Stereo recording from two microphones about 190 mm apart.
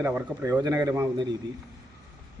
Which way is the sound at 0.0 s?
15° right (ahead or behind).